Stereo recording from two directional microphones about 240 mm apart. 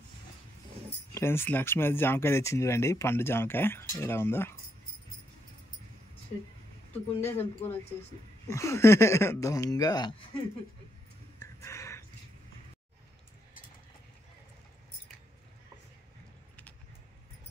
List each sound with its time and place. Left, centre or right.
0.8 s speech: centre
7.2 s speech: left
8.5 s speech: centre
11.3 s a sound: centre